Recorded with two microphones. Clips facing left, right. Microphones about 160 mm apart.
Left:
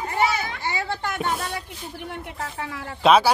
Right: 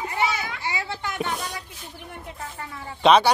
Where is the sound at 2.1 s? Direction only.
80° left.